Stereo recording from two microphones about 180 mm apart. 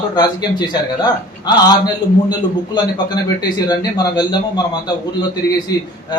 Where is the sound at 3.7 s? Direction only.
20° left (ahead or behind).